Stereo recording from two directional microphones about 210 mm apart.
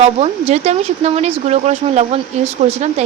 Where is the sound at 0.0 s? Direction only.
30° right (ahead or behind).